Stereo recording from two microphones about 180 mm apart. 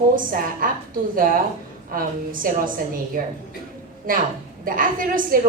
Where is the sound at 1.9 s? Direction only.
50° right (ahead or behind).